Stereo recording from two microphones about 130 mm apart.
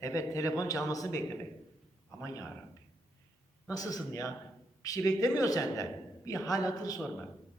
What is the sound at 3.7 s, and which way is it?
A man's voice, 30° left (ahead or behind).